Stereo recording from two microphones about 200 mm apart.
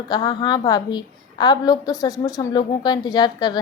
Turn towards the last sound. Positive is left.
turn(degrees=20)  # may be behind; listen again after turning